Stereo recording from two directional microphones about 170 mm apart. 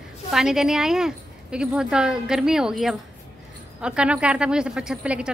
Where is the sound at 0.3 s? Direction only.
5° right (ahead or behind).